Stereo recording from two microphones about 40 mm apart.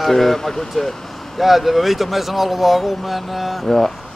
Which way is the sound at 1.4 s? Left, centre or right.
Centre.